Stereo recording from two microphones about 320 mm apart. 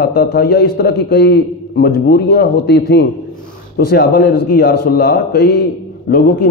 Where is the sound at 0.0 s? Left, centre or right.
Left.